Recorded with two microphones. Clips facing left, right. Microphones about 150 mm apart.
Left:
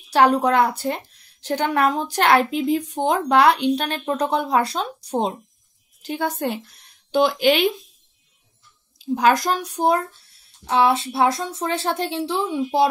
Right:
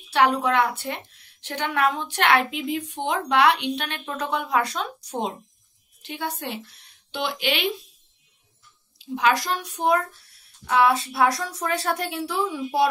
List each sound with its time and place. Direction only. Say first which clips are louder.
0.1 s a woman's voice: left 4 dB; 40° left (ahead or behind)
8.9 s a woman's voice: left 4 dB; 45° left (ahead or behind); by 12.8 s 25° left (ahead or behind)